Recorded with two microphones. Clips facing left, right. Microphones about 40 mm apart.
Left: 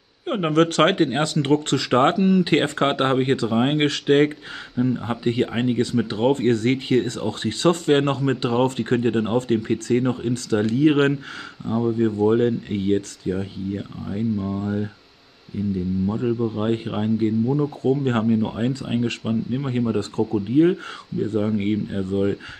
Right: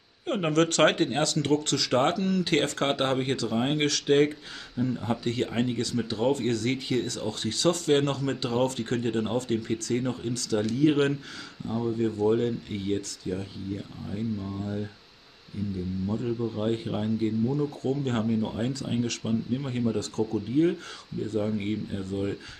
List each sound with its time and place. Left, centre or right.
0.3 s speech: centre
1.1 s speech: left
2.1 s speech: left
15.6 s speech: left
16.1 s speech: left